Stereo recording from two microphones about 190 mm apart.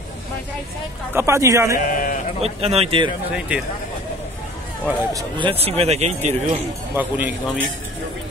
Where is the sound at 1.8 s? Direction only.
45° left (ahead or behind).